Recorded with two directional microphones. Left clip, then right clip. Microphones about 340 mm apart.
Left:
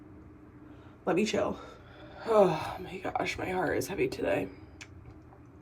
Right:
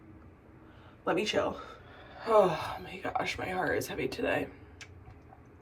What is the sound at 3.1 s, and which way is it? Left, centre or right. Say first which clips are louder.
Speech: left 1 dB; centre.